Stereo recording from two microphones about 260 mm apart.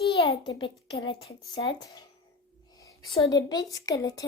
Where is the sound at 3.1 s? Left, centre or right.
Centre.